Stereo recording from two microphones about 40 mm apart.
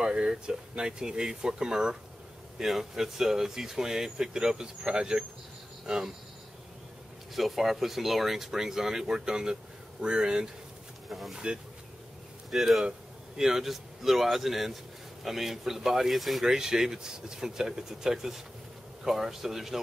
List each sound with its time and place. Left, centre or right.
0.0 s speech: right
2.6 s speech: centre
7.3 s speech: centre
11.1 s speech: centre
11.3 s speech: right
12.4 s speech: centre
16.4 s speech: centre